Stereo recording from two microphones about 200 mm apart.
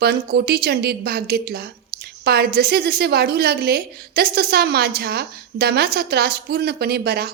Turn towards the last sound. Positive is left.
turn(degrees=-50)  # may be behind; listen again after turning